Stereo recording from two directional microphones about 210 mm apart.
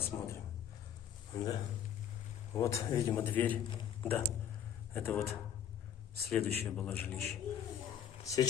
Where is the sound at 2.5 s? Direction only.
15° left (ahead or behind).